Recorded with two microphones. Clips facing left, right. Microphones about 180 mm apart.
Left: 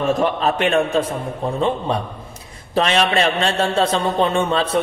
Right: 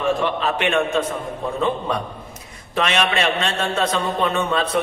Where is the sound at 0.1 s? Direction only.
40° left (ahead or behind).